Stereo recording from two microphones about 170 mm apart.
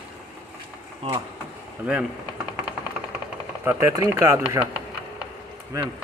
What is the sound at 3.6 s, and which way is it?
Speech, 15° right (ahead or behind).